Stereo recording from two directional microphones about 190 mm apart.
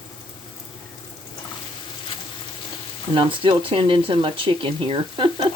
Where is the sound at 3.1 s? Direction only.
25° right (ahead or behind).